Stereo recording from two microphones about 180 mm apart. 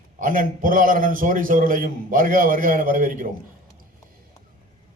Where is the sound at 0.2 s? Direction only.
50° right (ahead or behind).